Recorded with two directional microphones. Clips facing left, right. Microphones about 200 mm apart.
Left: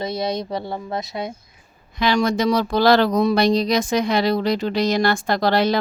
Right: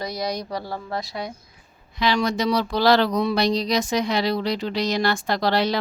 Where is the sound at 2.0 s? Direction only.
50° left (ahead or behind).